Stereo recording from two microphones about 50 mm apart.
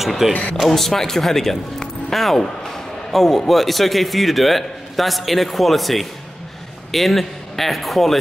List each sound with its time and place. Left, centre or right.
0.0 s speech: centre
0.3 s speech: left
0.6 s speech: centre